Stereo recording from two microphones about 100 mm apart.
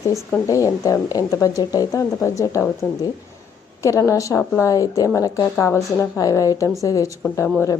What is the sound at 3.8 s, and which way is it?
A woman's voice, 30° left (ahead or behind).